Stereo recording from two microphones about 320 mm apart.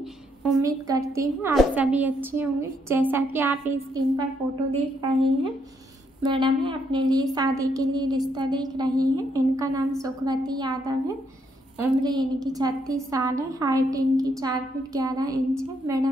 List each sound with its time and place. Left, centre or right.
0.4 s a woman's voice: centre
11.8 s a woman's voice: centre